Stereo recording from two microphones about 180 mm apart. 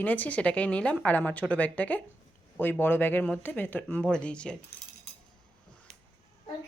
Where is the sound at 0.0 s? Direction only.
10° left (ahead or behind).